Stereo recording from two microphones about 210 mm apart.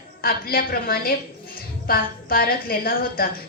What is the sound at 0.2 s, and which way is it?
A woman's voice, 45° left (ahead or behind).